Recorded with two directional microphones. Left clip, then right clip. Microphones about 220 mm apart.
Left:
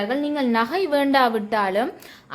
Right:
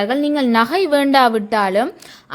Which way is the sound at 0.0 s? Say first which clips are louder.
Right 6 dB; 30° right (ahead or behind).